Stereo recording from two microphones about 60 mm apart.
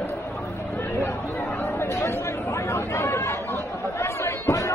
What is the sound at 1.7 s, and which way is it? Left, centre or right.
Chatter, left.